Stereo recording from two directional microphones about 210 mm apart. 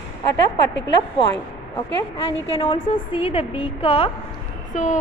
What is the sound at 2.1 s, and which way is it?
A woman's voice, 25° left (ahead or behind).